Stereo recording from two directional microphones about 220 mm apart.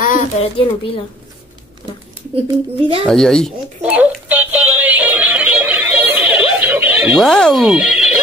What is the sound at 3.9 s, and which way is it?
Synthetic singing, 5° right (ahead or behind).